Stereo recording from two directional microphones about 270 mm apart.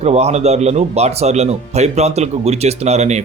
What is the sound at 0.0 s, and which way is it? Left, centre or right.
Speech, right.